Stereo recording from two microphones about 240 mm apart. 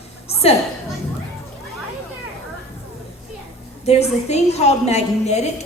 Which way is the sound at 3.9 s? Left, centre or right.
Left.